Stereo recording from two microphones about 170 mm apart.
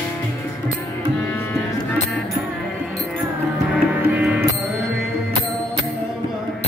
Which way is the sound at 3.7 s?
10° right (ahead or behind).